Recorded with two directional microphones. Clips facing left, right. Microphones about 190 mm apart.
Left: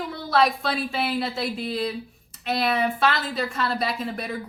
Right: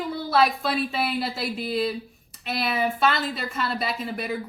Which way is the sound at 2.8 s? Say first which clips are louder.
Even; centre (ahead or behind).